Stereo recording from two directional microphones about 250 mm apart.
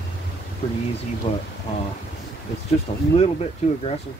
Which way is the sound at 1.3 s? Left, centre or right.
Left.